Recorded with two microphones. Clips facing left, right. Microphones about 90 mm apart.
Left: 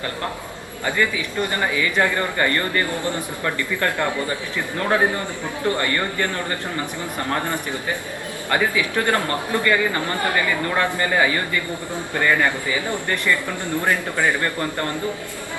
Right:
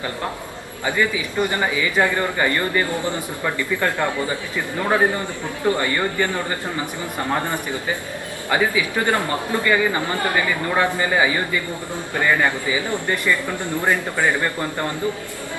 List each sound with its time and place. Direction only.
0.9 s speech: 15° right (ahead or behind)